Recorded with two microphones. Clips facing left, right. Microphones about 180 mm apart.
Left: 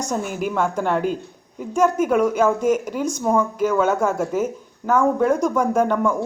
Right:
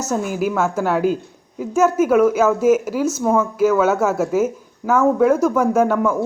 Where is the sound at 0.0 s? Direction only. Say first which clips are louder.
Right 3 dB; 5° right (ahead or behind).